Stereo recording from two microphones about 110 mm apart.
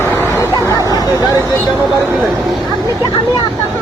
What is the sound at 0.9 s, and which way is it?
Speech, 35° left (ahead or behind).